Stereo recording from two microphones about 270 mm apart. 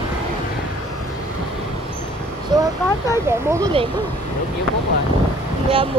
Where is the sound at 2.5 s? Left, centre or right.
Centre.